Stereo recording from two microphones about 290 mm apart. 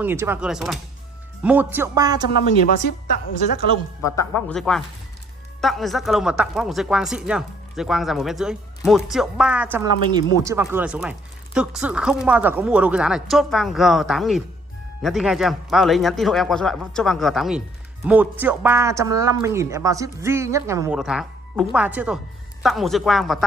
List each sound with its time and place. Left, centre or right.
0.0 s speech: centre
2.2 s a woman's voice: left
4.0 s speech: centre